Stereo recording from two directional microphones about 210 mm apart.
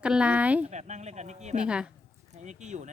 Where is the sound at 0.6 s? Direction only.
35° right (ahead or behind).